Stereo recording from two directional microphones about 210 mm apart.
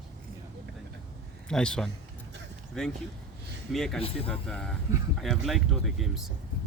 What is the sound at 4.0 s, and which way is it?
Speech, 25° left (ahead or behind).